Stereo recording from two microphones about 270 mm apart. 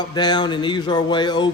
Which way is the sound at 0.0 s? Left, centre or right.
Centre.